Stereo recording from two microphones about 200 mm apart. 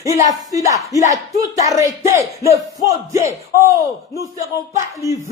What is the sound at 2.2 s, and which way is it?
Speech, 15° right (ahead or behind).